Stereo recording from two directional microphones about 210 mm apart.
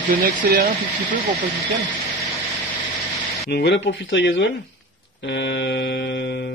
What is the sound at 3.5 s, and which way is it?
Speech, 55° left (ahead or behind).